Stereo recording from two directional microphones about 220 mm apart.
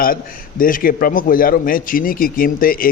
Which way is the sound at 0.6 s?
40° left (ahead or behind).